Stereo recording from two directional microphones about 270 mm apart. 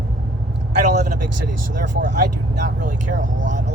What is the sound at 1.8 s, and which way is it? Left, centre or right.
Speech, right.